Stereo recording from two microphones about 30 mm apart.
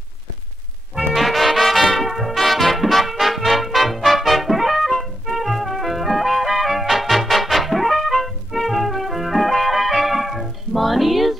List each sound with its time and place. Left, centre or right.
1.1 s music: centre
4.2 s trumpet: centre
5.2 s music: centre